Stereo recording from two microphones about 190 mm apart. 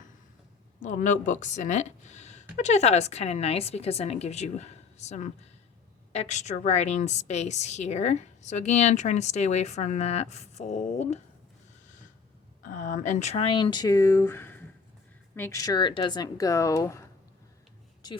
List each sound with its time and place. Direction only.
0.8 s a woman's voice: 40° left (ahead or behind)
12.6 s speech: 45° left (ahead or behind); by 18.2 s 20° left (ahead or behind)